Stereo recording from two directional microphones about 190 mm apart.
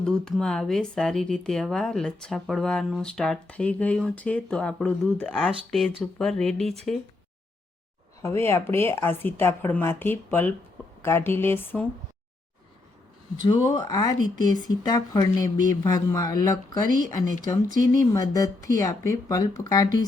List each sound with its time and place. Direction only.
0.0 s speech: 5° left (ahead or behind)
8.2 s speech: 15° left (ahead or behind)
13.3 s speech: 25° left (ahead or behind)
17.7 s speech: 45° right (ahead or behind)
18.1 s speech: 20° left (ahead or behind)